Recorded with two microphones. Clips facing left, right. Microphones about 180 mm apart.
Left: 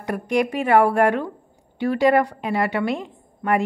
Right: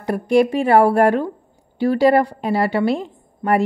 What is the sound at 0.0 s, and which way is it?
A woman's voice, 30° right (ahead or behind).